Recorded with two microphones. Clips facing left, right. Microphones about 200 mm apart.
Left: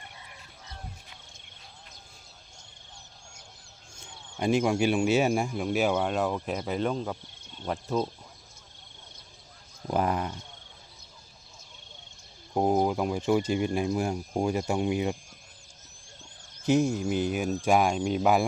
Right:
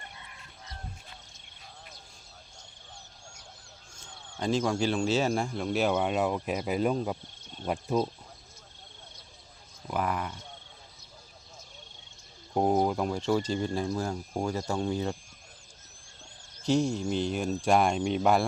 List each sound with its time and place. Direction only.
4.0 s a sound: 10° left (ahead or behind)
4.9 s speech: 10° left (ahead or behind); by 8.1 s 10° right (ahead or behind)
9.8 s a sound: 35° left (ahead or behind)
10.1 s speech: 25° left (ahead or behind)
12.5 s speech: 10° left (ahead or behind)
16.6 s speech: 5° left (ahead or behind)